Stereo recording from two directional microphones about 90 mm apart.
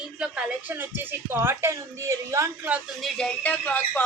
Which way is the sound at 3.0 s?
10° left (ahead or behind).